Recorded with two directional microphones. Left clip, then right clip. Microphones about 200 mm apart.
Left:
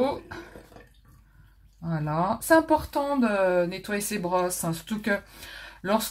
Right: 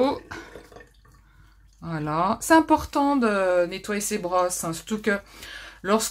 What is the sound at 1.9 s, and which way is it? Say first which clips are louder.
Speech: right 3 dB; 15° right (ahead or behind).